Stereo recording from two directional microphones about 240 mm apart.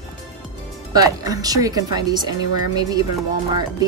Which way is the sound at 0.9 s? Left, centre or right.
Centre.